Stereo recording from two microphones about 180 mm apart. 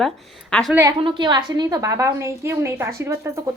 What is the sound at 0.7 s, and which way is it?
Speech, 15° right (ahead or behind).